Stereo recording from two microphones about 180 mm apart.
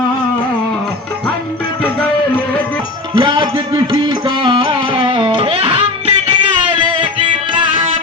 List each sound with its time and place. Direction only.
3.2 s music: 25° right (ahead or behind)